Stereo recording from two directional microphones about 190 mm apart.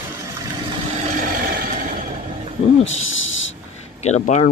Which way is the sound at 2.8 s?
90° left.